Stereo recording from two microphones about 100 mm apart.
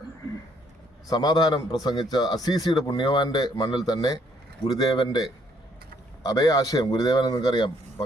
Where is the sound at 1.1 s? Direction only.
45° left (ahead or behind).